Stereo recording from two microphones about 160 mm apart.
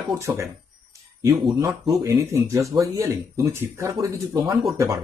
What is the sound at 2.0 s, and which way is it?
Speech, 15° right (ahead or behind).